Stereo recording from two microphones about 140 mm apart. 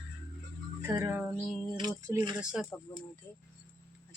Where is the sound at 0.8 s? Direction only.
20° right (ahead or behind).